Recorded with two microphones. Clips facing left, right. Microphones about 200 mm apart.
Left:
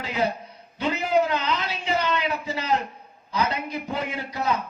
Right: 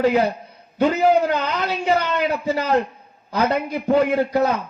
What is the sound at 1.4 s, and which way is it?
A man's voice, 50° right (ahead or behind).